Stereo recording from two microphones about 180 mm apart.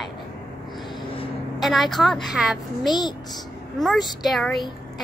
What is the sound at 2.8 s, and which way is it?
Speech, 25° left (ahead or behind).